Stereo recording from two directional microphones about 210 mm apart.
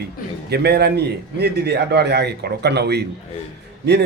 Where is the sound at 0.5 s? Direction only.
50° right (ahead or behind).